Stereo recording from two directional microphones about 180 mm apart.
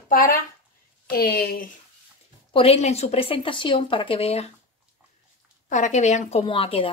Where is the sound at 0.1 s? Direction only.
50° left (ahead or behind).